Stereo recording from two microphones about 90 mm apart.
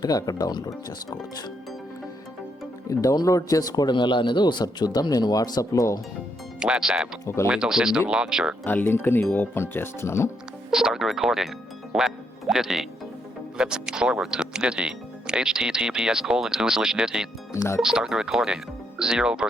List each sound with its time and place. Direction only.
0.0 s speech: 45° left (ahead or behind)
2.9 s speech: 40° left (ahead or behind)
6.6 s speech: 10° right (ahead or behind)
8.6 s speech: 20° left (ahead or behind)
10.7 s speech: 5° right (ahead or behind)
17.5 s speech: 30° left (ahead or behind)
17.7 s speech: 5° right (ahead or behind)